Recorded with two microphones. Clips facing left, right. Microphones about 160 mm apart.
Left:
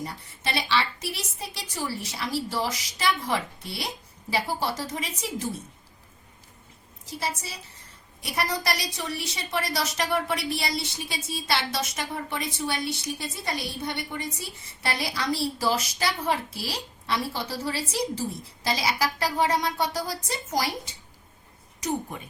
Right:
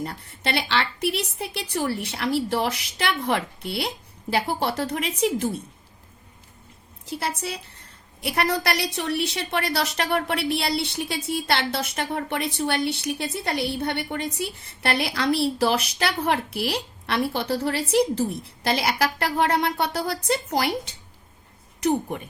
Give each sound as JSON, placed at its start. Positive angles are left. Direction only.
{"t": 0.0, "sound": "a woman's voice", "side_deg": -60}
{"t": 7.0, "sound": "a woman's voice", "side_deg": -65}